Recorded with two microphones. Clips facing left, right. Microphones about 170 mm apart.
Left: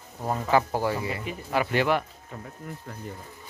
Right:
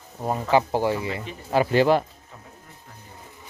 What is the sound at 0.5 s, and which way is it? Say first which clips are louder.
Speech: right 3 dB; 20° right (ahead or behind).